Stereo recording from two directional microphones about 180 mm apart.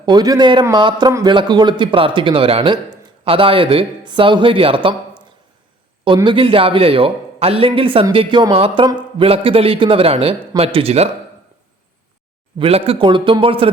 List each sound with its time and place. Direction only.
0.0 s a man's voice: 25° right (ahead or behind)
6.1 s speech: 25° right (ahead or behind)
12.5 s a man's voice: 30° right (ahead or behind)